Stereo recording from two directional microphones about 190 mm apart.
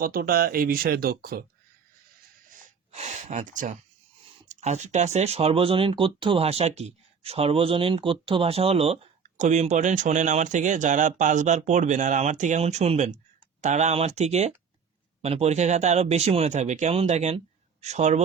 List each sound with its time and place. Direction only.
0.0 s speech: 50° right (ahead or behind)
2.9 s speech: 35° right (ahead or behind)